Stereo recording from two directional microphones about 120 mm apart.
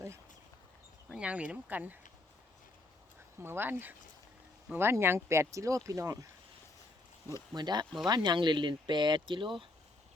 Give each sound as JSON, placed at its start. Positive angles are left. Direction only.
{"t": 1.1, "sound": "speech", "side_deg": -10}
{"t": 3.4, "sound": "speech", "side_deg": -20}
{"t": 7.5, "sound": "speech", "side_deg": -35}